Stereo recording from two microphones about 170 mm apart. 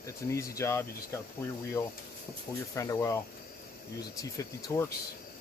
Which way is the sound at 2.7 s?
20° left (ahead or behind).